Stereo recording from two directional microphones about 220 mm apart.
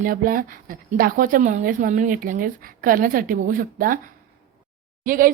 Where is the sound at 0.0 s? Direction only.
40° right (ahead or behind).